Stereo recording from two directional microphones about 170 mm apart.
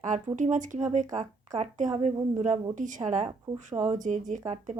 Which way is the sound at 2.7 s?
50° right (ahead or behind).